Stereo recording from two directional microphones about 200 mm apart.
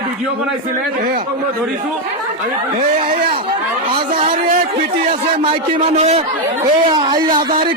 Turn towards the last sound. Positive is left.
turn(degrees=-25)  # may be behind; listen again after turning